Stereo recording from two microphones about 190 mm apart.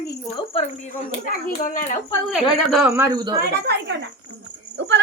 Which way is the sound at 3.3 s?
55° right (ahead or behind).